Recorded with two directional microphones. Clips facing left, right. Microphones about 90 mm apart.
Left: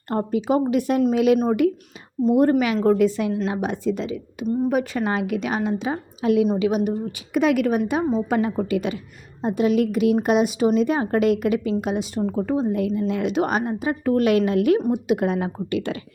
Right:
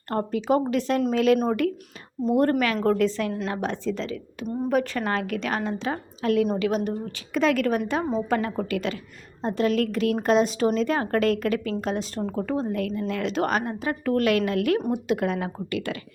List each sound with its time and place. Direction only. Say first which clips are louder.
0.1 s a woman's voice: left 2 dB; 15° left (ahead or behind)